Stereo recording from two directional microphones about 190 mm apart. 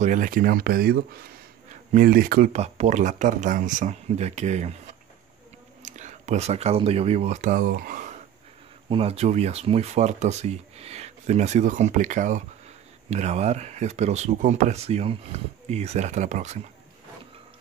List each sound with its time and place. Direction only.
0.0 s speech: 40° right (ahead or behind)
2.5 s speech: 35° right (ahead or behind)
5.8 s speech: 40° right (ahead or behind)
8.8 s speech: 30° right (ahead or behind)